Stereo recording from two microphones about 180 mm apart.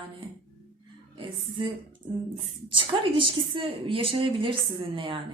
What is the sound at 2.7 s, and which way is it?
A woman's voice, 30° right (ahead or behind).